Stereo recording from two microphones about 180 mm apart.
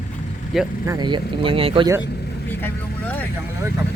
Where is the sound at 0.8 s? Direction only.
20° right (ahead or behind).